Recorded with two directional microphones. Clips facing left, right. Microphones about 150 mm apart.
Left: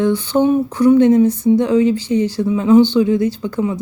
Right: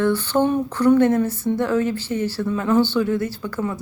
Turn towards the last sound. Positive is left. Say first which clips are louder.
# left 6 dB
turn(degrees=20)  # may be behind; listen again after turning